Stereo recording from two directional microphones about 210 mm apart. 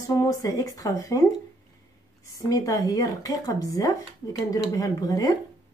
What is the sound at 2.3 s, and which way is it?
Speech, 15° left (ahead or behind).